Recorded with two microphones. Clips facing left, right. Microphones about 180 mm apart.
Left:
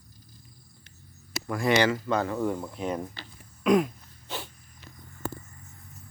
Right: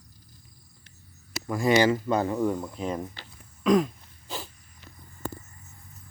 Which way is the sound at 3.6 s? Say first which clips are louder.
Even; 5° left (ahead or behind).